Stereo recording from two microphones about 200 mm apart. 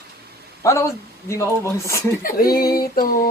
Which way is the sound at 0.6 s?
15° left (ahead or behind).